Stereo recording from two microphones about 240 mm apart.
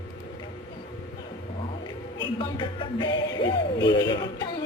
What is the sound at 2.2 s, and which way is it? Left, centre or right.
Speech, left.